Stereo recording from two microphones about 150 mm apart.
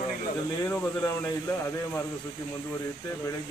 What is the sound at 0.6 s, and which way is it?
Speech, 15° left (ahead or behind).